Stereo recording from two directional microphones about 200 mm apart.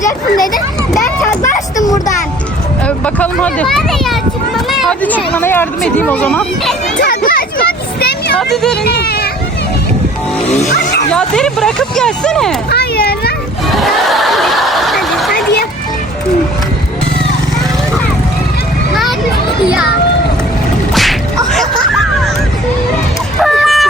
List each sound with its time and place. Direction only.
0.3 s a child's voice: 20° left (ahead or behind)
1.4 s vehicle: 35° left (ahead or behind)
2.8 s speech: 5° left (ahead or behind)
7.0 s vehicle: 45° left (ahead or behind)
8.8 s speech: 50° left (ahead or behind)
11.1 s speech: 5° left (ahead or behind)
12.7 s children playing: 50° left (ahead or behind)
13.7 s a sound: centre (ahead or behind)
20.9 s music: centre (ahead or behind)
23.4 s a sound: centre (ahead or behind)